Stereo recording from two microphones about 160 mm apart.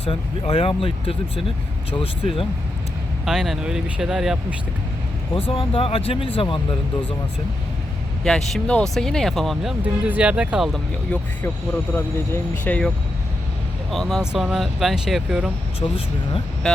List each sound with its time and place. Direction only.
0.0 s speech: 40° left (ahead or behind)
3.2 s speech: centre (ahead or behind)
5.3 s speech: 35° left (ahead or behind)
8.2 s speech: centre (ahead or behind)
11.1 s speech: 10° left (ahead or behind)
12.6 s speech: 10° left (ahead or behind)
13.9 s speech: centre (ahead or behind)
15.8 s speech: 35° left (ahead or behind)